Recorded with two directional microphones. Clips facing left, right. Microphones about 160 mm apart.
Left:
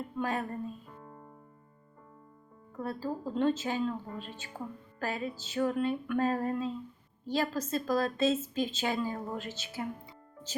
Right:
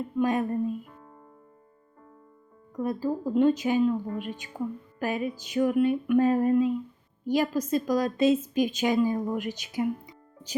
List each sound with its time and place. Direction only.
0.2 s a woman's voice: 15° right (ahead or behind)
2.7 s a woman's voice: 15° right (ahead or behind)